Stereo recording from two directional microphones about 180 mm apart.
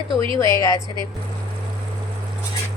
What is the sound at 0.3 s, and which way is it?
Speech, 20° left (ahead or behind).